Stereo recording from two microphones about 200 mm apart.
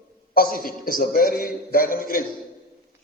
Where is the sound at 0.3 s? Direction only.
45° left (ahead or behind).